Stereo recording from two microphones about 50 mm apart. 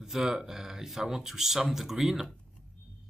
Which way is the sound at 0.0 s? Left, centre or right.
Centre.